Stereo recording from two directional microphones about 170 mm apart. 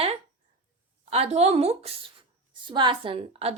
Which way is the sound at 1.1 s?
35° right (ahead or behind).